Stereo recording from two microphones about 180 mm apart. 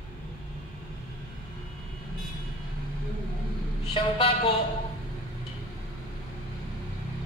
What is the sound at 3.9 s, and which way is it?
Speech, 30° left (ahead or behind).